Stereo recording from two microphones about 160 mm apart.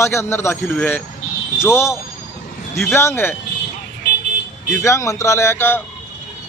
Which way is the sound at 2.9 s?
15° left (ahead or behind).